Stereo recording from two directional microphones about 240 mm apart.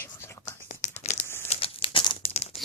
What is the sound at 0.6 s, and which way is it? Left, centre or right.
Tearing, left.